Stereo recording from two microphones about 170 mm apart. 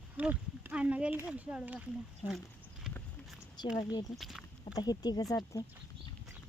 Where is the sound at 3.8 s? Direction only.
25° left (ahead or behind).